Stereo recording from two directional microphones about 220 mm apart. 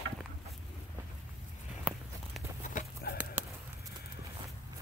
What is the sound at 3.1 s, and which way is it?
Clip-clop, 45° left (ahead or behind).